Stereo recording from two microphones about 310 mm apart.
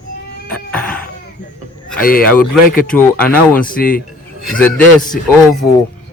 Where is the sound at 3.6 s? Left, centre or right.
Left.